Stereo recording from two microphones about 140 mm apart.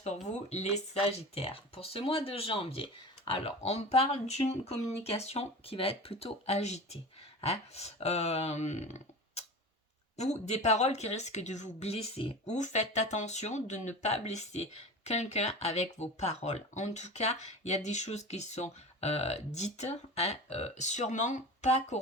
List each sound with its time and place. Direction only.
0.5 s speech: 50° left (ahead or behind)
12.5 s speech: 60° left (ahead or behind)